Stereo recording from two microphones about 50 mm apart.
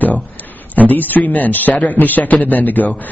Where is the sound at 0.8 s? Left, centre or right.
Left.